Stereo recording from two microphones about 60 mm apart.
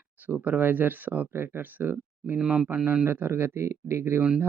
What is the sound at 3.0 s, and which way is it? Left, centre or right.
Speech, right.